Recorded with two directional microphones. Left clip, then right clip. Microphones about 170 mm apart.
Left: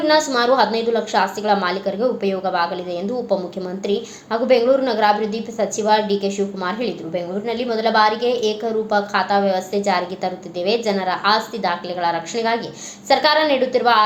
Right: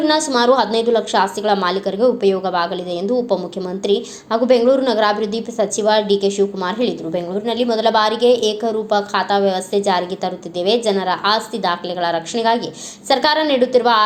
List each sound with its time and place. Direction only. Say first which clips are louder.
0.0 s a woman's voice: right 1 dB; 30° right (ahead or behind)